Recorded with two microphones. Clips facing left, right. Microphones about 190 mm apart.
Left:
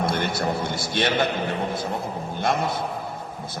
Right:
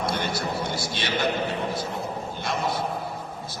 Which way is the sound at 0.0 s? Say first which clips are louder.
Left 3 dB; 55° left (ahead or behind).